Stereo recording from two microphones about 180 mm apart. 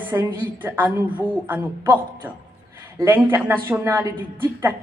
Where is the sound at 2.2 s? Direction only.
10° right (ahead or behind).